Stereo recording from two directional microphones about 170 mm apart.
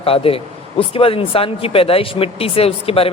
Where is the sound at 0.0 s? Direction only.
35° left (ahead or behind).